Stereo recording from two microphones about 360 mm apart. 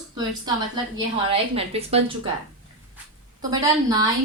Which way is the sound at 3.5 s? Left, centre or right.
Centre.